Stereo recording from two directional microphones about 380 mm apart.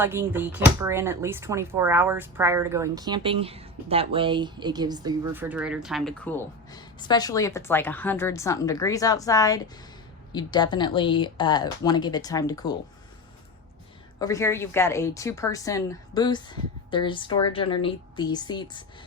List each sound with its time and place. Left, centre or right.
0.0 s a woman's voice: centre
14.2 s a woman's voice: centre